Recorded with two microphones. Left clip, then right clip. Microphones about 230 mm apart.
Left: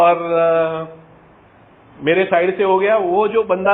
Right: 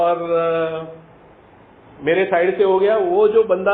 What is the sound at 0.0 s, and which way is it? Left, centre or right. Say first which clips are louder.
Mantra: left 4 dB; left.